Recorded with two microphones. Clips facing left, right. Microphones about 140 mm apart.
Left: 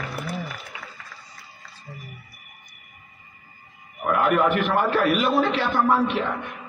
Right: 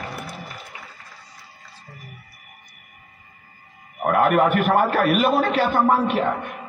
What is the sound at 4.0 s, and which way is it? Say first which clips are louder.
A man's voice: right 3 dB; 50° right (ahead or behind).